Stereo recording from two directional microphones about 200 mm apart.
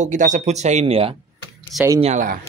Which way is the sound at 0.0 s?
40° right (ahead or behind).